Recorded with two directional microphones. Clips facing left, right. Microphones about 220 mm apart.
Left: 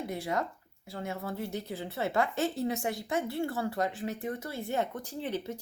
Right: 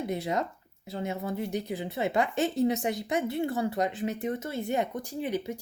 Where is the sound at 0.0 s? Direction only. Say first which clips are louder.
Right 3 dB; 20° right (ahead or behind).